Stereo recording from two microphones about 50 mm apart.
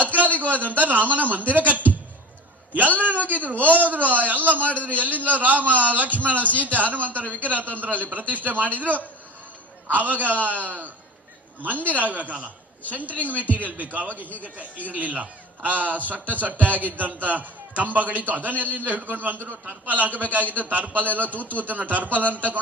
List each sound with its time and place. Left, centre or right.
0.3 s a man's voice: right
3.5 s a man's voice: left
3.8 s a man's voice: right